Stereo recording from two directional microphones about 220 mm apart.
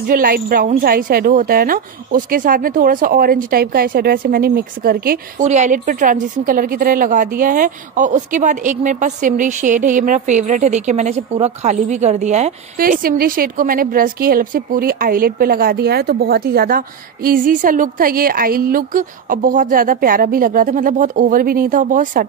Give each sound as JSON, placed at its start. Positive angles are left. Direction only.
{"t": 0.0, "sound": "a woman's voice", "side_deg": -40}